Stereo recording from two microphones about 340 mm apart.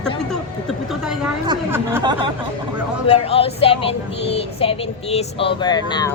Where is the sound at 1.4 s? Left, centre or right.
Centre.